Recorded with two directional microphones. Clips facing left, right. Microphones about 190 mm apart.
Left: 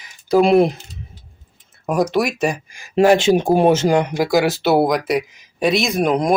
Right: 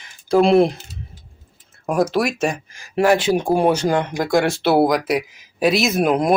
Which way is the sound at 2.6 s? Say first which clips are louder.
Left 4 dB; 15° left (ahead or behind).